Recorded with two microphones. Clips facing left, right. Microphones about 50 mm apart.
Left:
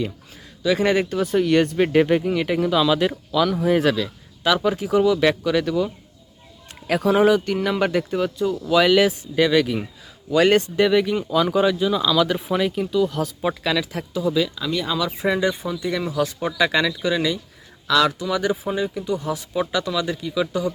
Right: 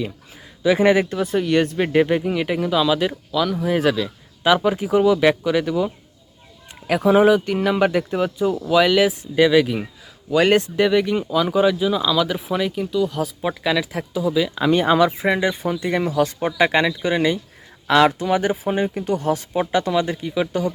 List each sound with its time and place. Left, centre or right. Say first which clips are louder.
0.6 s speech: right 3 dB; centre
4.4 s speech: right 3 dB; centre
14.5 s speech: right 8 dB; right
15.2 s speech: right 1 dB; right
15.6 s speech: right 3 dB; right
16.6 s speech: right 2 dB; right
19.0 s speech: right 4 dB; right